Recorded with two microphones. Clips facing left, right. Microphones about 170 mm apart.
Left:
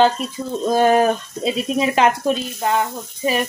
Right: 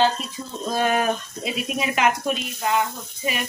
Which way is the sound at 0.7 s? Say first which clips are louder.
Left 7 dB; 40° left (ahead or behind).